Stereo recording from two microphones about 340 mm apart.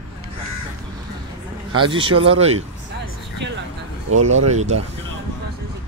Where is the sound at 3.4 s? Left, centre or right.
Right.